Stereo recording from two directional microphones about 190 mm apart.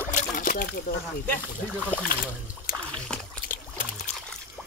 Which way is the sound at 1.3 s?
5° left (ahead or behind).